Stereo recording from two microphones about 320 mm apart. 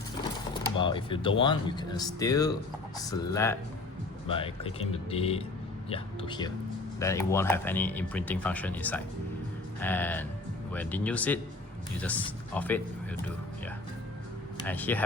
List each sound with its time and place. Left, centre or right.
0.5 s speech: centre
12.5 s speech: centre
14.7 s speech: centre